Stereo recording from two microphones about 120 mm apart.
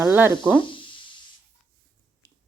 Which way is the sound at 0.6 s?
45° left (ahead or behind).